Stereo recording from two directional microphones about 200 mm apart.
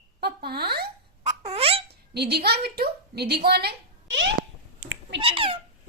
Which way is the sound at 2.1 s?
55° right (ahead or behind).